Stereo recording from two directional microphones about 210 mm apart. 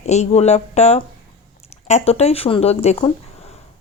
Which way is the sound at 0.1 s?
30° left (ahead or behind).